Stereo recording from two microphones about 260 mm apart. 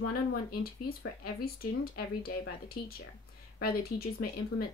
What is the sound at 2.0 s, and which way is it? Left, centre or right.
Speech, left.